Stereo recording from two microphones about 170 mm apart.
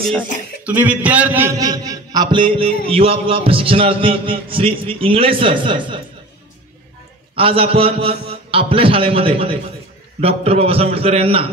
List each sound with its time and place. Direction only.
0.0 s speech: 5° left (ahead or behind)
0.7 s a man's voice: 10° right (ahead or behind); by 5.9 s 30° right (ahead or behind)
7.3 s a man's voice: 35° right (ahead or behind)